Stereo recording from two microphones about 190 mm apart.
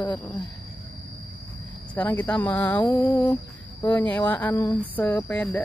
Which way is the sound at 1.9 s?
10° left (ahead or behind).